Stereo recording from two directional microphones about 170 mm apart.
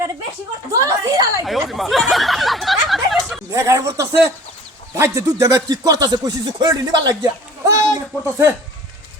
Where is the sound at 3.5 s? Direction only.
20° right (ahead or behind).